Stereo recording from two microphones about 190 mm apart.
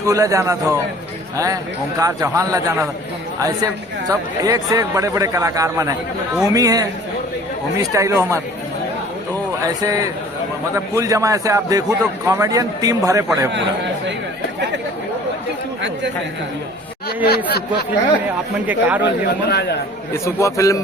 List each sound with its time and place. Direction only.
0.0 s a man's voice: 15° right (ahead or behind)
2.0 s a man's voice: 15° right (ahead or behind)
4.1 s a man's voice: 20° right (ahead or behind)
9.8 s a man's voice: 20° right (ahead or behind)
17.2 s speech: 55° left (ahead or behind)
18.6 s a man's voice: 10° right (ahead or behind)
19.5 s speech: 60° left (ahead or behind)
20.2 s a man's voice: 15° left (ahead or behind)